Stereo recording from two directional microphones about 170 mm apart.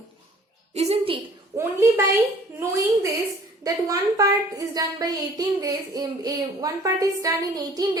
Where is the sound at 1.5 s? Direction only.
15° right (ahead or behind).